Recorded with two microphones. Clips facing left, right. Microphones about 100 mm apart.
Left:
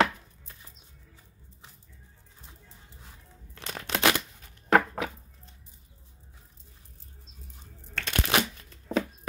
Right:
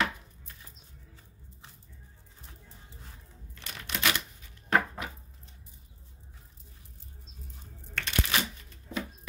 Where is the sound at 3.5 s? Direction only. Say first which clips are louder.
Left 6 dB; 70° left (ahead or behind).